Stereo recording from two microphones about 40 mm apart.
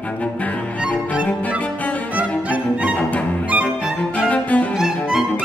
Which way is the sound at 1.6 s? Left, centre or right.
Left.